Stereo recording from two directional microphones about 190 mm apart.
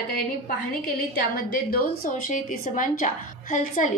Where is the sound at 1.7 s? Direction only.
45° left (ahead or behind).